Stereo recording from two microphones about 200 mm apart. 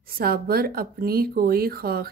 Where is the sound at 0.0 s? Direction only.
50° right (ahead or behind).